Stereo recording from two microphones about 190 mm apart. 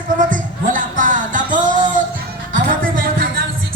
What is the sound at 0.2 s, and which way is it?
Music, 45° right (ahead or behind).